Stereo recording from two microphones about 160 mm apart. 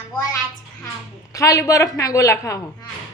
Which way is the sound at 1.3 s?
20° left (ahead or behind).